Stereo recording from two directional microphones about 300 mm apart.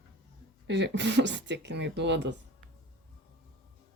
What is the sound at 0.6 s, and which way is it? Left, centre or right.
Speech, right.